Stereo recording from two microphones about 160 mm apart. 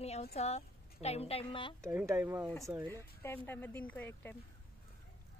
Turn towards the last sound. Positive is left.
turn(degrees=10)  # may be behind; listen again after turning